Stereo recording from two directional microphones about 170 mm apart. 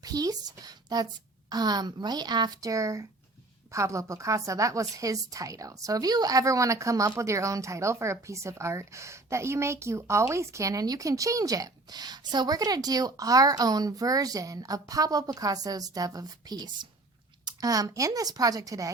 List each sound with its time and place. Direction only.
0.0 s a woman's voice: 20° right (ahead or behind)